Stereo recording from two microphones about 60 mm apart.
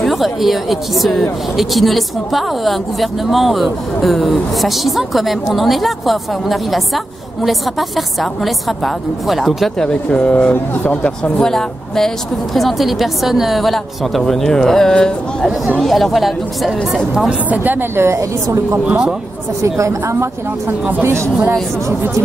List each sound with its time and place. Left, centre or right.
0.0 s a woman's voice: centre
9.8 s speech: centre
10.5 s speech: left
11.3 s a woman's voice: centre
17.3 s a woman's voice: right
17.7 s a woman's voice: right
18.9 s a man's voice: centre
19.6 s a woman's voice: right